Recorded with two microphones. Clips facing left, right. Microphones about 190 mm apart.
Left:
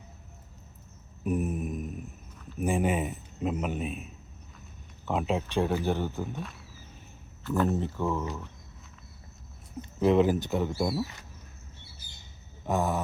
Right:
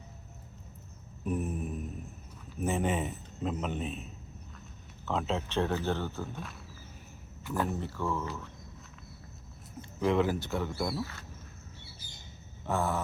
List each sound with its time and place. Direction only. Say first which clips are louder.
1.2 s a sound: left 4 dB; 15° left (ahead or behind)
2.6 s speech: left 3 dB; 10° left (ahead or behind)
5.0 s speech: left 3 dB; 15° left (ahead or behind)
7.4 s speech: left 5 dB; 10° right (ahead or behind)
7.7 s speech: left 4 dB; 20° left (ahead or behind)
10.0 s speech: left 5 dB; 20° left (ahead or behind)
12.6 s speech: left 3 dB; 15° left (ahead or behind)